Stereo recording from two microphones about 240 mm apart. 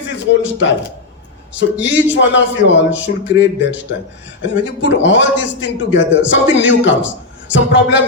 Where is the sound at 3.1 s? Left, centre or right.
Left.